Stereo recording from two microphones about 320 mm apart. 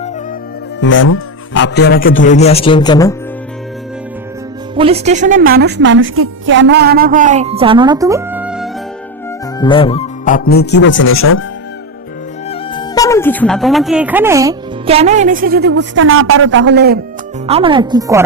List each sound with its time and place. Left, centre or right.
0.8 s speech: left; by 3.2 s centre
4.7 s a woman's voice: centre
9.6 s speech: centre; by 11.4 s left
12.5 s speech: centre; by 17.0 s right
17.4 s speech: centre